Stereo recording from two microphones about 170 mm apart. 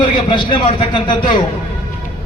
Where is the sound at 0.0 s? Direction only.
30° left (ahead or behind).